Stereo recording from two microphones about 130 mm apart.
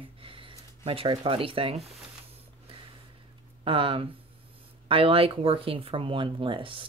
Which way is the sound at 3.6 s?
45° right (ahead or behind).